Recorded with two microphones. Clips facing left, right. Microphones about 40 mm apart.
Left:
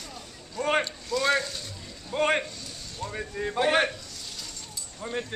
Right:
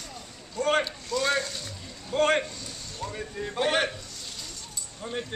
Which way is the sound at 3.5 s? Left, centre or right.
Centre.